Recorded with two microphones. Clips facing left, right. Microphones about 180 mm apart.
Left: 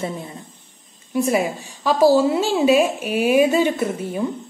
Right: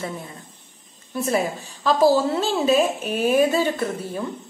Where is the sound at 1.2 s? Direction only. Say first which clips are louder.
Left 3 dB; 15° left (ahead or behind).